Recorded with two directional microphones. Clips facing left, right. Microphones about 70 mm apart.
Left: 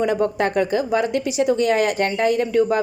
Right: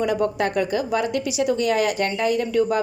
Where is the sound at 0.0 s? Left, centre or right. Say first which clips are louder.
Left 2 dB; left.